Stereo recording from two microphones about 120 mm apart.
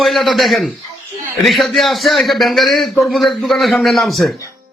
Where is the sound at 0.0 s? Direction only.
Centre (ahead or behind).